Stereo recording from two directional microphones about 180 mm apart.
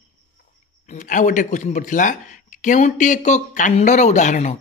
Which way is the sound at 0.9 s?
45° left (ahead or behind).